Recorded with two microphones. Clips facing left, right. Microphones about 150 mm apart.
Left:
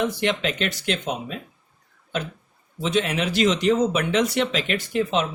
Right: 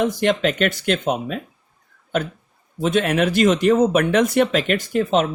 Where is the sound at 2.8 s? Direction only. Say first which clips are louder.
Right 5 dB; 55° right (ahead or behind).